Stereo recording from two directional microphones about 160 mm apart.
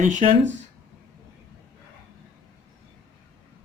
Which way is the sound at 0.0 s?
50° right (ahead or behind).